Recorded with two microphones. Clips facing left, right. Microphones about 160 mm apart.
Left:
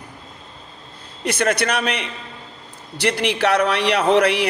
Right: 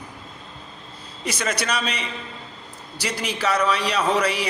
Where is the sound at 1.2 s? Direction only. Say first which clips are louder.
Left 6 dB; 60° left (ahead or behind).